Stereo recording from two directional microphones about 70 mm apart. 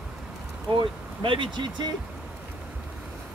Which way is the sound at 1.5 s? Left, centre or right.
Right.